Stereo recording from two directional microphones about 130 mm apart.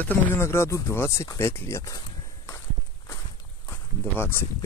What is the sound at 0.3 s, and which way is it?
Speech, 20° left (ahead or behind).